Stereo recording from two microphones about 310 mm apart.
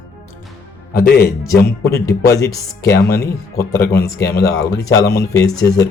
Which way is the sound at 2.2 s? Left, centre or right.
Centre.